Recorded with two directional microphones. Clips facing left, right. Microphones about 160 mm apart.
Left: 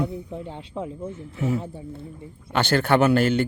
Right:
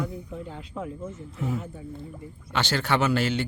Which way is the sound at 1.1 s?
75° left (ahead or behind).